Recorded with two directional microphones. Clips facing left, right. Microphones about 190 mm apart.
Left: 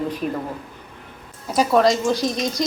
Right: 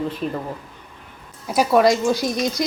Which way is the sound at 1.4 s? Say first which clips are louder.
Right 1 dB; 10° right (ahead or behind).